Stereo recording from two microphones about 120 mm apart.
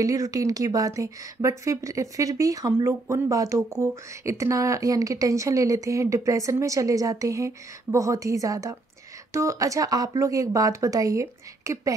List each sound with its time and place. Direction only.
0.0 s speech: 30° right (ahead or behind)